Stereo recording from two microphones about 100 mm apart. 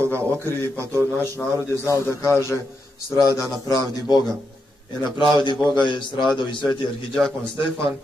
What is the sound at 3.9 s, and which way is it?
Speech, 40° left (ahead or behind).